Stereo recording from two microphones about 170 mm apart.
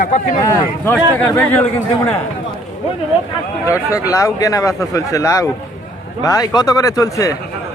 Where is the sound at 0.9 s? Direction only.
10° left (ahead or behind).